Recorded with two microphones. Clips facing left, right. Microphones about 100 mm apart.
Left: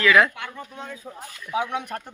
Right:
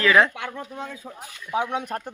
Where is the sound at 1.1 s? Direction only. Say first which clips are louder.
Right 1 dB; centre (ahead or behind).